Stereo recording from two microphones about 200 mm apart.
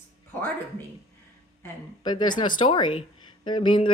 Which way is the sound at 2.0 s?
20° left (ahead or behind).